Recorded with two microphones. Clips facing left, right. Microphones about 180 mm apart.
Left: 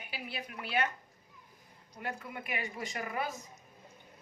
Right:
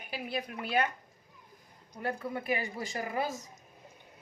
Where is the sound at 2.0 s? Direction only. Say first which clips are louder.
Right 7 dB; 35° right (ahead or behind).